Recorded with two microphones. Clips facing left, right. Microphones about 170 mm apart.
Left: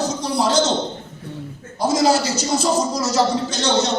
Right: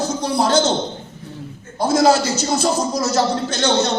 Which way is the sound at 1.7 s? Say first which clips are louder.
Right 2 dB; 55° right (ahead or behind).